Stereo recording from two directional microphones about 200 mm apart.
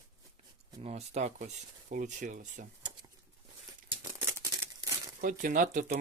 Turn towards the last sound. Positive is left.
turn(degrees=-40)  # may be behind; listen again after turning